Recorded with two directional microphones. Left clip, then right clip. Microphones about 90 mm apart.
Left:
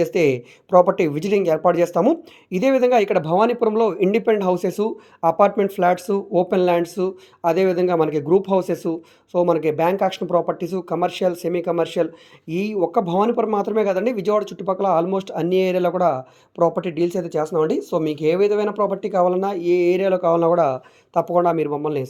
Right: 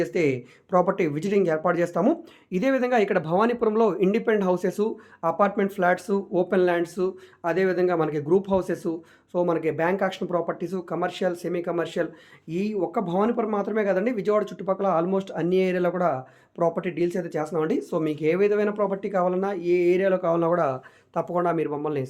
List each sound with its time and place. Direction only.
0.0 s speech: 60° left (ahead or behind)
5.5 s speech: 55° left (ahead or behind)